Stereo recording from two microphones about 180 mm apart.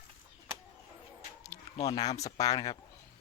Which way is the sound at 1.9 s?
20° left (ahead or behind).